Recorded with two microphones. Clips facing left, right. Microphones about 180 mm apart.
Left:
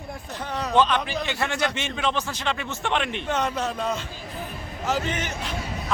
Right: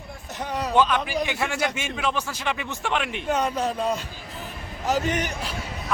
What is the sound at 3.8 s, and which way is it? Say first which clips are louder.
A man's voice: right 2 dB; 35° right (ahead or behind).